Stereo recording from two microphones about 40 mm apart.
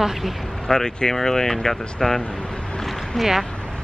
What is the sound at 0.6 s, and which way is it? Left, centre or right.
Speech, centre.